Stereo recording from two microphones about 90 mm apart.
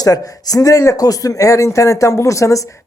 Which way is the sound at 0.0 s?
45° left (ahead or behind).